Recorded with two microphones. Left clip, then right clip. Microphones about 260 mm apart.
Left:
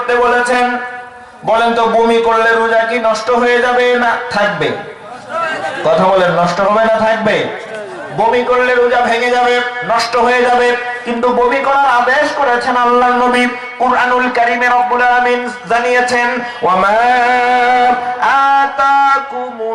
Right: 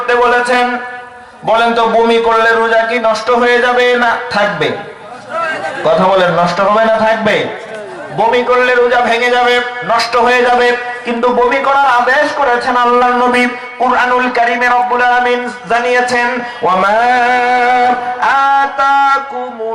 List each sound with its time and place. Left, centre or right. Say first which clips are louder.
0.1 s a man's voice: right 1 dB; centre
1.8 s a man's voice: right 1 dB; right
2.3 s a man's voice: right 1 dB; centre
5.3 s a sound: right 1 dB; centre
5.8 s a man's voice: right 1 dB; right; by 11.2 s centre
11.2 s a man's voice: right 1 dB; right
11.4 s a man's voice: right 1 dB; centre